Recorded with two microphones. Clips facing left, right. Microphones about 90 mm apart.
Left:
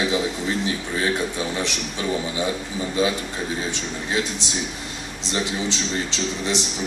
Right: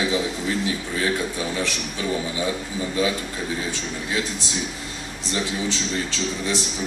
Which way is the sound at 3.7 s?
20° left (ahead or behind).